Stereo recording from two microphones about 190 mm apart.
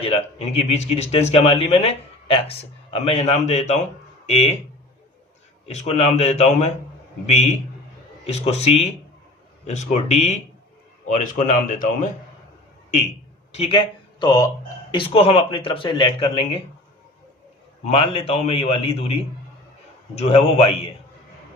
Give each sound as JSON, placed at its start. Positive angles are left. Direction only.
{"t": 0.0, "sound": "a man's voice", "side_deg": 30}
{"t": 5.6, "sound": "a man's voice", "side_deg": 35}
{"t": 8.3, "sound": "a man's voice", "side_deg": 35}
{"t": 13.5, "sound": "speech", "side_deg": 30}
{"t": 17.8, "sound": "a man's voice", "side_deg": 30}